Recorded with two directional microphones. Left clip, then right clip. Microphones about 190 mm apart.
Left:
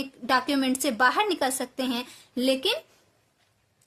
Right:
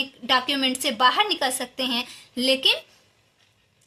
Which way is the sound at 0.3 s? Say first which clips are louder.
Right 2 dB; 50° left (ahead or behind).